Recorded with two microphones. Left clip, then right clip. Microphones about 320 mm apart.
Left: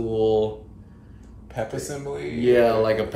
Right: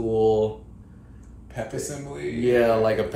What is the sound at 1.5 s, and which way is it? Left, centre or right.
Speech, centre.